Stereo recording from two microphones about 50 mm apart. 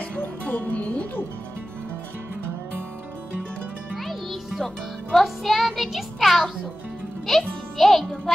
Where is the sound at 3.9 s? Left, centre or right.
Centre.